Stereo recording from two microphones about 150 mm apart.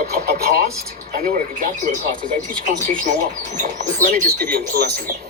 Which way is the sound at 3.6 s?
65° right (ahead or behind).